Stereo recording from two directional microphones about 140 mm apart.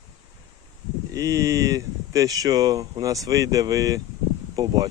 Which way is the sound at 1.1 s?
25° right (ahead or behind).